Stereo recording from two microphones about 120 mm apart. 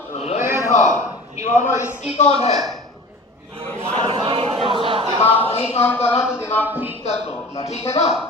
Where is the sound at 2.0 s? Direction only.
65° left (ahead or behind).